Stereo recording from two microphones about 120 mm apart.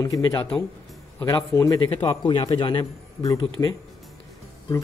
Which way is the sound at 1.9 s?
40° left (ahead or behind).